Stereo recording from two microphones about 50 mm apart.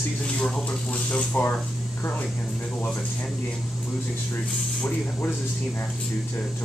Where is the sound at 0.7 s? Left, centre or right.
Centre.